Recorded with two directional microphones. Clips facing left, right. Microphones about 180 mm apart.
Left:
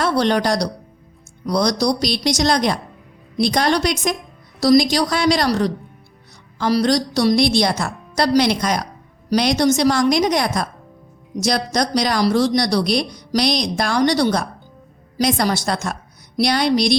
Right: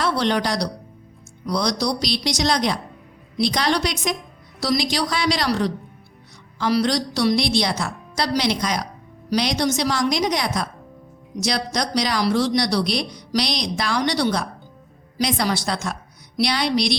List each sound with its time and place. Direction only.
0.0 s speech: 45° left (ahead or behind)